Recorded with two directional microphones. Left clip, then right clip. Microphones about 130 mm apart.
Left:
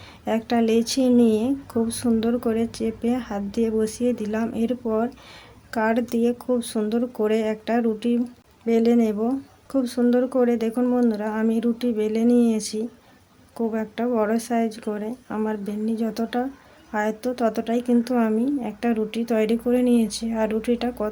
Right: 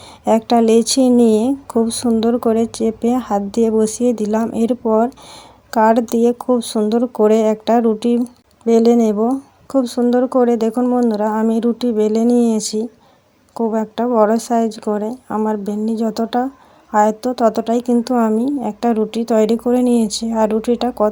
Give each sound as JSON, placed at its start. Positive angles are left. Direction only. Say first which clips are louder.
{"t": 0.3, "sound": "speech", "louder": "right 9 dB", "side_deg": -45}
{"t": 9.1, "sound": "speech", "louder": "right 8 dB", "side_deg": -20}
{"t": 9.7, "sound": "speech", "louder": "right 6 dB", "side_deg": -40}
{"t": 10.8, "sound": "speech", "louder": "right 6 dB", "side_deg": -25}
{"t": 11.0, "sound": "speech", "louder": "right 7 dB", "side_deg": -40}
{"t": 14.0, "sound": "speech", "louder": "right 9 dB", "side_deg": -30}
{"t": 14.3, "sound": "speech", "louder": "right 8 dB", "side_deg": -40}
{"t": 15.3, "sound": "speech", "louder": "right 8 dB", "side_deg": -25}
{"t": 15.6, "sound": "speech", "louder": "right 7 dB", "side_deg": -45}